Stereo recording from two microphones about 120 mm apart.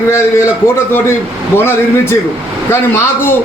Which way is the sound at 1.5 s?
20° left (ahead or behind).